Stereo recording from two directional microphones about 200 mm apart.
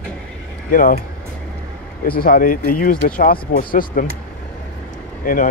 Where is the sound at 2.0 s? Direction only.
45° left (ahead or behind).